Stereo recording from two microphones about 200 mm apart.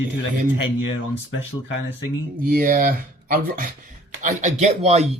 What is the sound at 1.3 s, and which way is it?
Speech, 65° left (ahead or behind).